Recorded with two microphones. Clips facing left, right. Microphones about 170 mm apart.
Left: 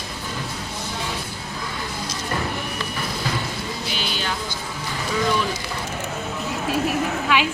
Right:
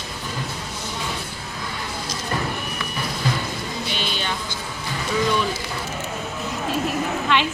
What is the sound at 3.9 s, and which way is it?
Music, 5° left (ahead or behind).